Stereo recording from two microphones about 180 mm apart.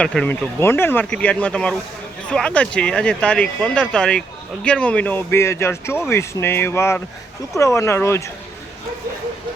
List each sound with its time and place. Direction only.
0.0 s speech: 5° left (ahead or behind)